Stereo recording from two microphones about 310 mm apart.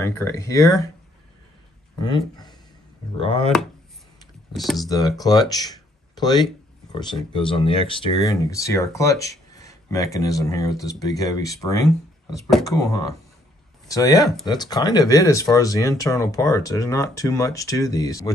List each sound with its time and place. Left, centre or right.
0.0 s speech: centre
2.0 s speech: centre
4.6 s speech: centre
4.8 s speech: centre